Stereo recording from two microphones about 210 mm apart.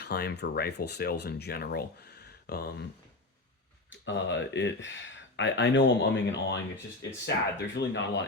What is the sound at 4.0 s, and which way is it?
Speech, 60° left (ahead or behind).